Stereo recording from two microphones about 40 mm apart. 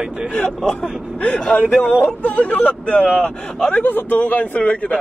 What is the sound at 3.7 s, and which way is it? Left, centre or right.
Speech, left.